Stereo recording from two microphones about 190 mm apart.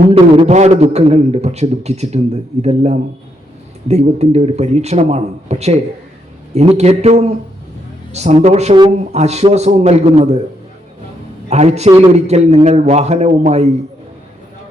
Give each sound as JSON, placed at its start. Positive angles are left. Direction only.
{"t": 0.1, "sound": "a man's voice", "side_deg": -35}
{"t": 11.4, "sound": "a man's voice", "side_deg": -35}